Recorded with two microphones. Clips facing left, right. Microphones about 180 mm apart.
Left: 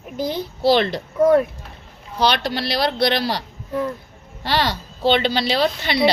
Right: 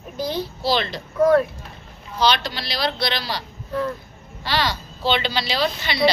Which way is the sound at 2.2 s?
60° left (ahead or behind).